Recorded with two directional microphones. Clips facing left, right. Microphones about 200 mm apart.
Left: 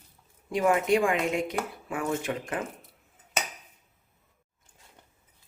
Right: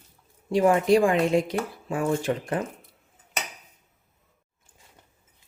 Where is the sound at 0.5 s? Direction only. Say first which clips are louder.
Right 4 dB; 35° right (ahead or behind).